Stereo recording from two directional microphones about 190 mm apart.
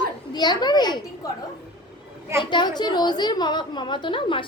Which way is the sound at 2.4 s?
25° left (ahead or behind).